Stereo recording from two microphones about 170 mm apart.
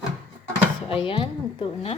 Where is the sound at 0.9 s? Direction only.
30° left (ahead or behind).